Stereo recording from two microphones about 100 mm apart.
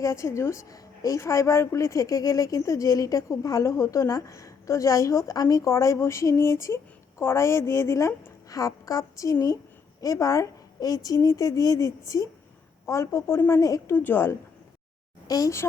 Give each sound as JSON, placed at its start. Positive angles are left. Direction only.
{"t": 0.0, "sound": "a woman's voice", "side_deg": 30}
{"t": 13.9, "sound": "a woman's voice", "side_deg": 20}
{"t": 15.3, "sound": "a woman's voice", "side_deg": 35}